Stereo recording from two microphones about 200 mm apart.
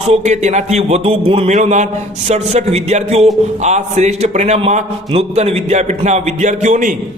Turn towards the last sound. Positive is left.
turn(degrees=-40)  # may be behind; listen again after turning